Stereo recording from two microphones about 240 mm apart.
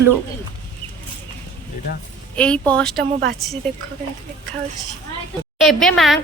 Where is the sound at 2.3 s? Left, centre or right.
Centre.